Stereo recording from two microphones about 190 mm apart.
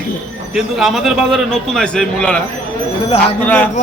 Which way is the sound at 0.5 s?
Centre (ahead or behind).